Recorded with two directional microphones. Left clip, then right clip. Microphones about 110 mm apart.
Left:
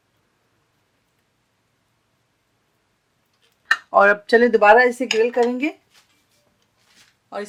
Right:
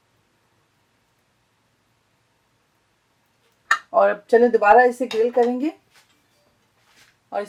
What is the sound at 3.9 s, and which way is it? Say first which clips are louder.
Speech: left 3 dB; 55° left (ahead or behind).